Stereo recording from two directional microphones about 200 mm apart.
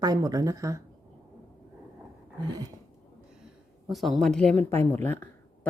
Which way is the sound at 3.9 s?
Centre (ahead or behind).